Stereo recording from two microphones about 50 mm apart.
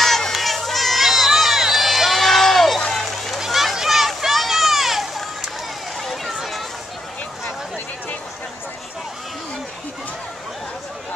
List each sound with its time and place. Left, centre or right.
0.0 s crowd: centre
2.9 s run: centre
3.3 s a sound: centre